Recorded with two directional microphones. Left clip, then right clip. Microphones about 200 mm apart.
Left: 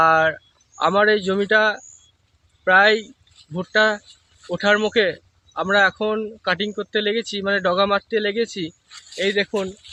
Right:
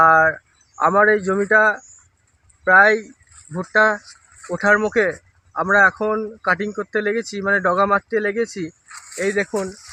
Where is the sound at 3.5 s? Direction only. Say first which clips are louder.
Right 2 dB; 5° left (ahead or behind).